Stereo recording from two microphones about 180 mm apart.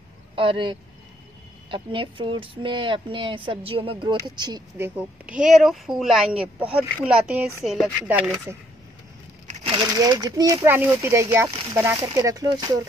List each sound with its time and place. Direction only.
0.4 s speech: 30° right (ahead or behind)
4.7 s speech: 10° right (ahead or behind)
9.5 s speech: 30° right (ahead or behind)